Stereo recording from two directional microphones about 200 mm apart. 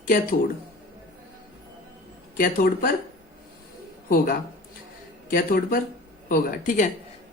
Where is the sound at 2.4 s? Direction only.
45° left (ahead or behind).